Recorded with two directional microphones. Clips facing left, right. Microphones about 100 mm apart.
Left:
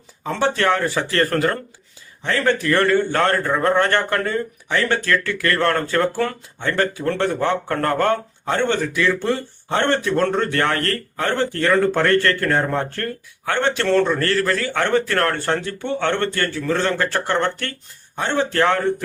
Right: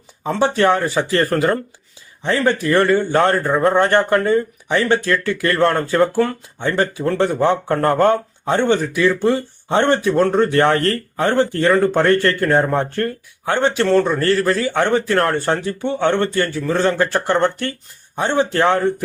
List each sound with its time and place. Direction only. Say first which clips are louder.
0.3 s a man's voice: right 3 dB; 15° right (ahead or behind)